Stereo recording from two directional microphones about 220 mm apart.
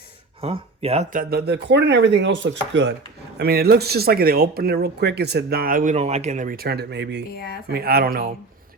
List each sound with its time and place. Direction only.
0.4 s speech: 25° right (ahead or behind); by 8.2 s 45° right (ahead or behind)